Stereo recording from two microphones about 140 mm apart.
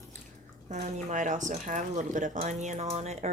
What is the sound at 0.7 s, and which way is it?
Speech, 60° right (ahead or behind).